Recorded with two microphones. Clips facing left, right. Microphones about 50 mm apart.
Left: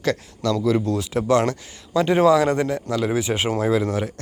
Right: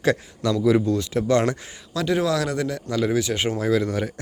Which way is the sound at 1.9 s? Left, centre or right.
Left.